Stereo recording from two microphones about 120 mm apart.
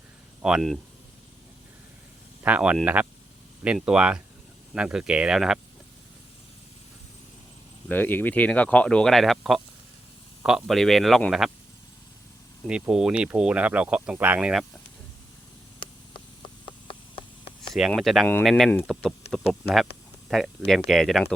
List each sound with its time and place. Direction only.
0.4 s speech: centre (ahead or behind)
2.4 s speech: 10° right (ahead or behind)
7.9 s speech: 15° left (ahead or behind); by 11.5 s centre (ahead or behind)
12.6 s speech: 5° right (ahead or behind)
15.8 s a sound: 45° left (ahead or behind)
17.7 s speech: centre (ahead or behind)
20.3 s speech: 5° left (ahead or behind)